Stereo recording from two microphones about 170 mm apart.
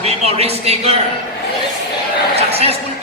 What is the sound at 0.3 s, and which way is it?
Speech, 35° right (ahead or behind).